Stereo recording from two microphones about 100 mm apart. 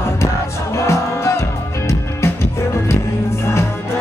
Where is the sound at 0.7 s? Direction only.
30° left (ahead or behind).